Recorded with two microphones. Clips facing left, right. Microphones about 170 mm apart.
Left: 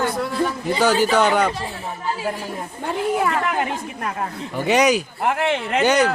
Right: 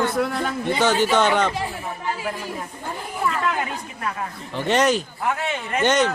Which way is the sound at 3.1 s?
80° left.